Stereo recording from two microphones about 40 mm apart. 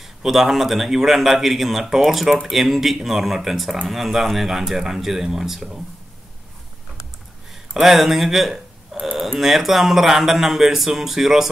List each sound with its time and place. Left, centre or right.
0.0 s speech: centre
7.8 s speech: centre